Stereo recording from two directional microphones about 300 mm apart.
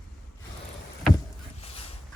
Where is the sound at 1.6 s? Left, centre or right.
Centre.